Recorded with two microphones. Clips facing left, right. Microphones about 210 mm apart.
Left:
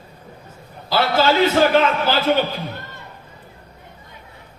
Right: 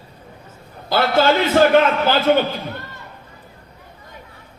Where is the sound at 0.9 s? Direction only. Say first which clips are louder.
Right 2 dB; 55° right (ahead or behind).